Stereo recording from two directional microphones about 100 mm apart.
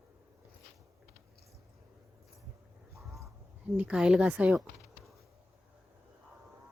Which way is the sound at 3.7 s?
10° right (ahead or behind).